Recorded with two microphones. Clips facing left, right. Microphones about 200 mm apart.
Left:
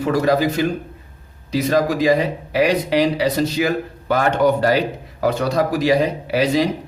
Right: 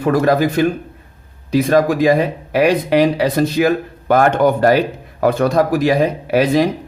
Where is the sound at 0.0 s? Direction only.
55° right (ahead or behind).